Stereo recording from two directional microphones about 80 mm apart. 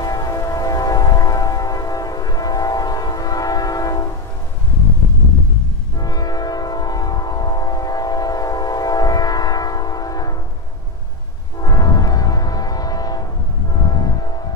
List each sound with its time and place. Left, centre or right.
0.0 s train: left
5.9 s train: left
11.6 s music: left